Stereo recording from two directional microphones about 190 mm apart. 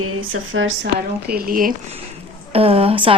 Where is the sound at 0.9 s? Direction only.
50° right (ahead or behind).